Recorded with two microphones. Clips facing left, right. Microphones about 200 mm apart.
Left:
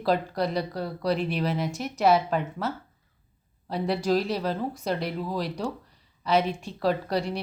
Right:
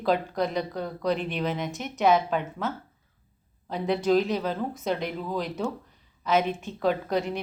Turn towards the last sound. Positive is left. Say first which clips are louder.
# even
turn(degrees=0)  # may be behind; listen again after turning